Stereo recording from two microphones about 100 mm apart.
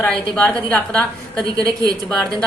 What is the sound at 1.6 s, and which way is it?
Speech, 40° right (ahead or behind).